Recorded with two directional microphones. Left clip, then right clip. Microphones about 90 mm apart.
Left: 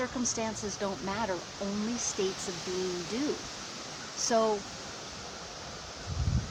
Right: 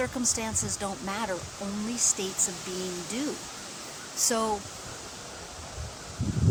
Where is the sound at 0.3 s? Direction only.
20° right (ahead or behind).